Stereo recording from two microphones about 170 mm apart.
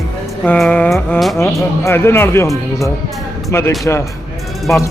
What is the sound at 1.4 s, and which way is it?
Speech, 15° left (ahead or behind).